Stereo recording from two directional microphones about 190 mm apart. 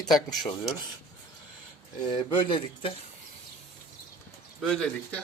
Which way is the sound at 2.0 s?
25° left (ahead or behind).